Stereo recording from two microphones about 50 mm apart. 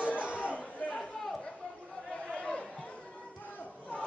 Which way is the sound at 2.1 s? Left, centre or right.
Centre.